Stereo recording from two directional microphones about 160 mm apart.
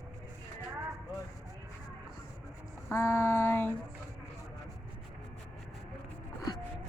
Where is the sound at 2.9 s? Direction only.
15° left (ahead or behind).